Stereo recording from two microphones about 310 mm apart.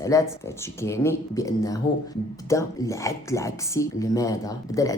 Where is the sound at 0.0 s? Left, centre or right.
Centre.